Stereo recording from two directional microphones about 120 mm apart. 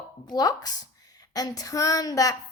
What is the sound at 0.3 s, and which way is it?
Speech, 35° left (ahead or behind).